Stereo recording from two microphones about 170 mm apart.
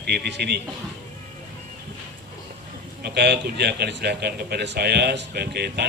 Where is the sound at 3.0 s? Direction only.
75° right (ahead or behind).